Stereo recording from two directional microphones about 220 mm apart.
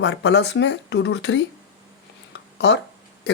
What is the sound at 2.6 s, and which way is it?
Speech, 50° left (ahead or behind).